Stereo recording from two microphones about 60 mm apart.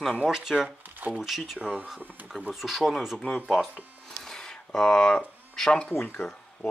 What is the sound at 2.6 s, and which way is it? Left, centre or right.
Speech, centre.